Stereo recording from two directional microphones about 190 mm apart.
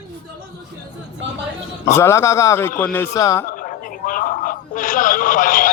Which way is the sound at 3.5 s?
45° left (ahead or behind).